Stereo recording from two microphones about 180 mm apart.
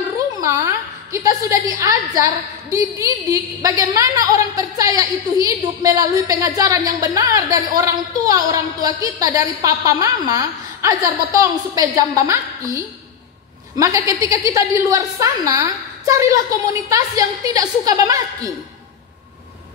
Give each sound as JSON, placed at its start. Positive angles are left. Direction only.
{"t": 0.4, "sound": "a woman's voice", "side_deg": -15}
{"t": 1.8, "sound": "a woman's voice", "side_deg": -20}